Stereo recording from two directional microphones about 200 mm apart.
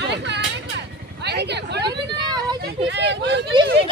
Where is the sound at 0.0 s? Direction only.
60° right (ahead or behind).